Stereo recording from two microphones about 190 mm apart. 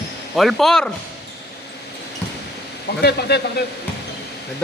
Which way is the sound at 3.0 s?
60° left (ahead or behind).